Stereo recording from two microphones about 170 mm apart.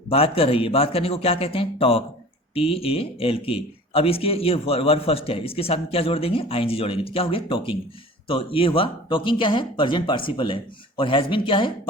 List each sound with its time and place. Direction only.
0.1 s speech: 35° left (ahead or behind)